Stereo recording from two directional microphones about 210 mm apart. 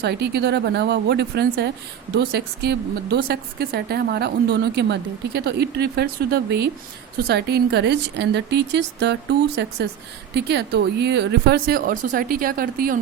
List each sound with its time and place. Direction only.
0.0 s a woman's voice: 50° right (ahead or behind)